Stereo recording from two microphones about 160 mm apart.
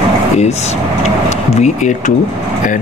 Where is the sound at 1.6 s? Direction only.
50° left (ahead or behind).